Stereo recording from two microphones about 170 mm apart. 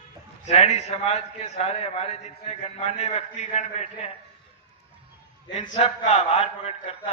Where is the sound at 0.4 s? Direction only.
40° left (ahead or behind).